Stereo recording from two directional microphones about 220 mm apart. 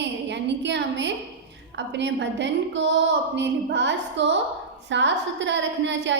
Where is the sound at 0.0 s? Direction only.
50° right (ahead or behind).